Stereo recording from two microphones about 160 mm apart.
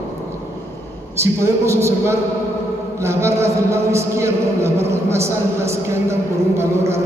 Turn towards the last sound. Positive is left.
turn(degrees=-15)  # may be behind; listen again after turning